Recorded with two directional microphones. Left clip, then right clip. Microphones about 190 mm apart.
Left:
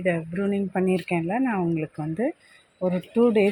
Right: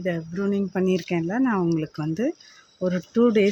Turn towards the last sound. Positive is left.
turn(degrees=-25)  # may be behind; listen again after turning